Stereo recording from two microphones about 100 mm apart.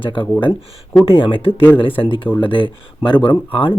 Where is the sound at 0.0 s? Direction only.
60° left (ahead or behind).